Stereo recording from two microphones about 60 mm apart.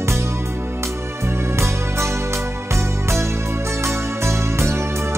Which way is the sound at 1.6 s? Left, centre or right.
Right.